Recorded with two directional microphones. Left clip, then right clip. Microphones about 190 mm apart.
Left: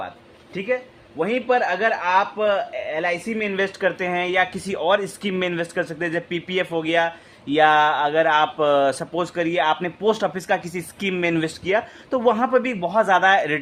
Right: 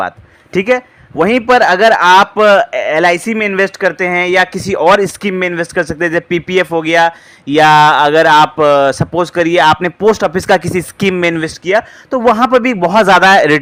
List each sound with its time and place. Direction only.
0.5 s a man's voice: 50° right (ahead or behind)
11.3 s a man's voice: 20° right (ahead or behind)
12.8 s a man's voice: 45° right (ahead or behind)